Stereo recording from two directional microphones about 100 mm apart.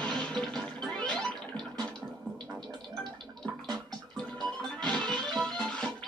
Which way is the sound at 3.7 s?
5° left (ahead or behind).